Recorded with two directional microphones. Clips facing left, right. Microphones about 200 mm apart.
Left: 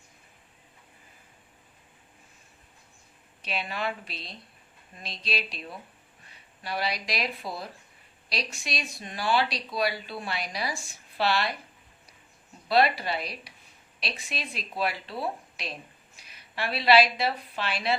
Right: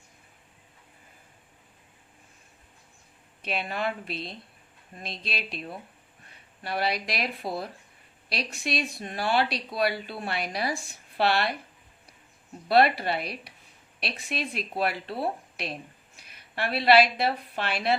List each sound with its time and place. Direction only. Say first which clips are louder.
3.4 s speech: right 2 dB; 50° right (ahead or behind)
6.6 s speech: right 3 dB; 55° right (ahead or behind)
12.6 s a woman's voice: right 2 dB; 55° right (ahead or behind)